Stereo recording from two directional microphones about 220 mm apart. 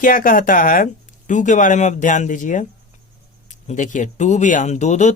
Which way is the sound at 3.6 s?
35° left (ahead or behind).